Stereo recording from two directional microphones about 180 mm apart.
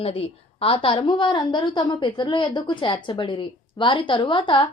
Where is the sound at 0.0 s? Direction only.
35° left (ahead or behind).